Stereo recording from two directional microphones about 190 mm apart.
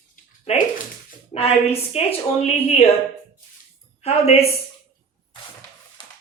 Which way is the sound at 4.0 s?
35° left (ahead or behind).